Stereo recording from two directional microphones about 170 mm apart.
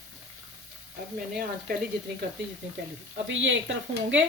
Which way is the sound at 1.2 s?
60° right (ahead or behind).